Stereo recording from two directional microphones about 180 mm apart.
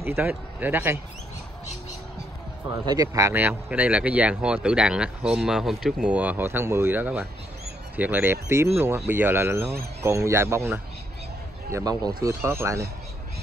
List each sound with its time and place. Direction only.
0.0 s speech: 10° right (ahead or behind)
2.7 s speech: 20° right (ahead or behind)